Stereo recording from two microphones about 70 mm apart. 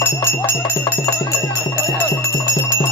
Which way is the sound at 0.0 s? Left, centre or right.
Left.